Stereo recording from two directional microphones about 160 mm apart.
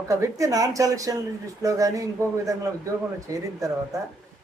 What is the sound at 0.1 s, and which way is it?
A woman's voice, 20° right (ahead or behind).